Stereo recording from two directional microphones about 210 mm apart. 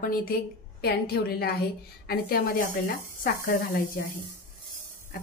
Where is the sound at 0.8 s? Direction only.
50° left (ahead or behind).